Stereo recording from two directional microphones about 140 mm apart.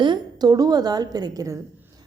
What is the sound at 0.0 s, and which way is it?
A woman's voice, 30° right (ahead or behind).